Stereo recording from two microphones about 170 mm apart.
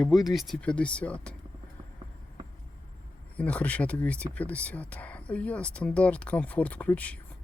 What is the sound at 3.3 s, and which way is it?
Speech, 10° left (ahead or behind).